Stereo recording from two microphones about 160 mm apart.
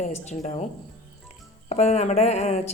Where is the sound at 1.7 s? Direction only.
45° left (ahead or behind).